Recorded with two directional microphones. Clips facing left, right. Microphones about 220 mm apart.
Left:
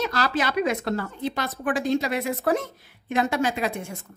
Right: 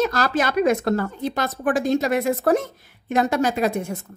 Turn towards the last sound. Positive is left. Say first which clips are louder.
# right 4 dB
turn(degrees=-40)  # may be behind; listen again after turning